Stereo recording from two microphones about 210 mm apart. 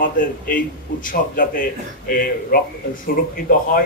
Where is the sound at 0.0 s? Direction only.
40° left (ahead or behind).